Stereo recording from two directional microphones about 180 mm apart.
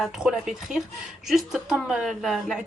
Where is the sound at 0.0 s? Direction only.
5° right (ahead or behind).